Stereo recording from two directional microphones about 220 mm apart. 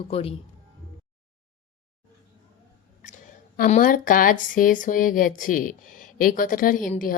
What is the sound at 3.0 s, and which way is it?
Speech, 35° left (ahead or behind).